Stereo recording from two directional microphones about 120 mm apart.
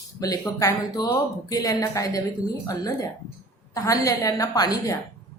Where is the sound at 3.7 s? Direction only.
30° left (ahead or behind).